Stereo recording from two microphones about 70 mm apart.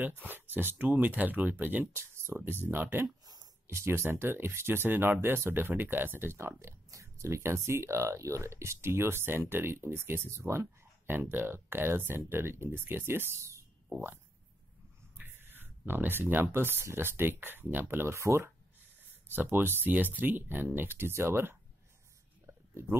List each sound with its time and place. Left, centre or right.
0.0 s speech: right
6.6 s speech: right
15.1 s speech: right
19.3 s speech: right
22.5 s a sound: right